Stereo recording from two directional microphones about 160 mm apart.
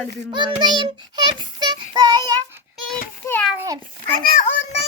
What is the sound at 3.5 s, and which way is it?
Child singing, 20° right (ahead or behind).